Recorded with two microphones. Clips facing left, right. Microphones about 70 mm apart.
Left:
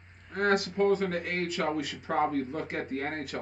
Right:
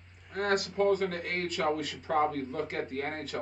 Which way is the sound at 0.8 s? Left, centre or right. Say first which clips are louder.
Left 1 dB; centre.